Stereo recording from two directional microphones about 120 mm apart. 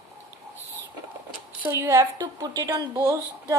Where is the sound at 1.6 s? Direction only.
20° right (ahead or behind).